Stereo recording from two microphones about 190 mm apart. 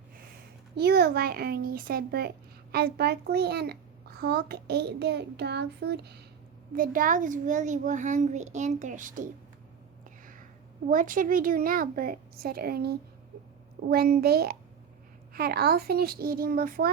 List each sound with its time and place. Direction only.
0.8 s a child's voice: 60° right (ahead or behind)
6.7 s a child's voice: 45° right (ahead or behind)
10.8 s a child's voice: 45° right (ahead or behind)